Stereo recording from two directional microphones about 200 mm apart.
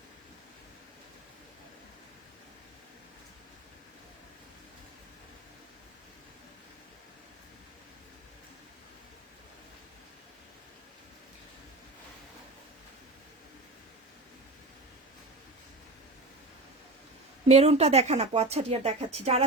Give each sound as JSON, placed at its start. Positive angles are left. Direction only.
{"t": 17.5, "sound": "speech", "side_deg": -30}